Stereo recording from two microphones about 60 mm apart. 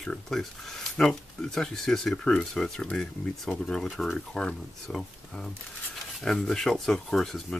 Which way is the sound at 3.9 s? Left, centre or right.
Centre.